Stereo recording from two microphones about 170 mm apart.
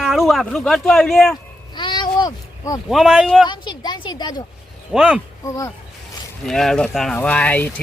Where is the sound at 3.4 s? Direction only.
25° left (ahead or behind).